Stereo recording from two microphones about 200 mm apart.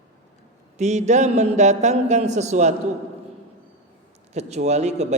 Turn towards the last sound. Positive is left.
turn(degrees=-35)  # may be behind; listen again after turning